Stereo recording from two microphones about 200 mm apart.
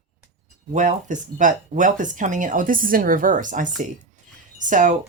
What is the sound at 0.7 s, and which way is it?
Speech, 40° right (ahead or behind).